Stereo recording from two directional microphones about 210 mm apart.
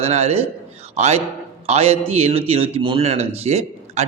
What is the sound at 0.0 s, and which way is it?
A man's voice, 30° right (ahead or behind).